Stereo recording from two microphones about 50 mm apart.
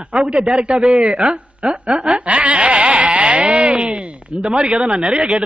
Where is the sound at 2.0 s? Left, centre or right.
Right.